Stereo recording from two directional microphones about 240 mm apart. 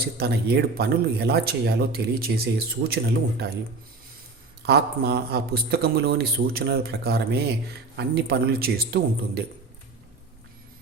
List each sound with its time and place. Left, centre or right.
0.0 s speech: right
4.6 s speech: right